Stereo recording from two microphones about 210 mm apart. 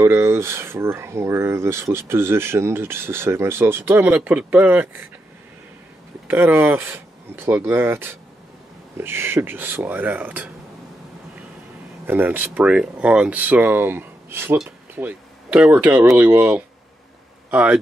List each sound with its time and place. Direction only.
0.0 s speech: 10° right (ahead or behind)
6.2 s speech: 10° right (ahead or behind)
12.1 s speech: 10° right (ahead or behind)